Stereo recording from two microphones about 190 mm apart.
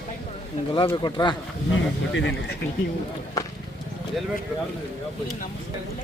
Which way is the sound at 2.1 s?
75° left (ahead or behind).